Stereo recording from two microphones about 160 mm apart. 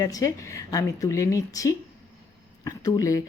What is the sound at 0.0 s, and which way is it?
A woman's voice, 20° left (ahead or behind).